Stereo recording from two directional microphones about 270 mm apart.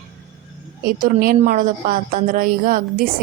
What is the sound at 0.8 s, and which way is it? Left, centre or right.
A woman's voice, right.